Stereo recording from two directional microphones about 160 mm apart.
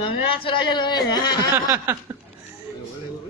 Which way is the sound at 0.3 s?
35° left (ahead or behind).